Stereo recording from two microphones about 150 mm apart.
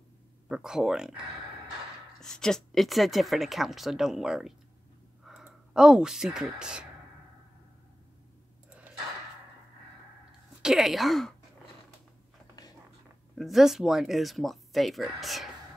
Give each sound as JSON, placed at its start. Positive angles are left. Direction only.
{"t": 0.5, "sound": "a woman's voice", "side_deg": -5}
{"t": 10.6, "sound": "a woman's voice", "side_deg": -5}
{"t": 12.6, "sound": "a sound", "side_deg": 25}
{"t": 13.4, "sound": "a woman's voice", "side_deg": 0}